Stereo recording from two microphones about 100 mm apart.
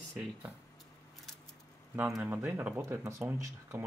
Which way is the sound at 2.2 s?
15° right (ahead or behind).